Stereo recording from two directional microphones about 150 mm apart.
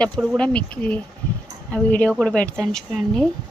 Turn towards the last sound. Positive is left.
turn(degrees=0)  # may be behind; listen again after turning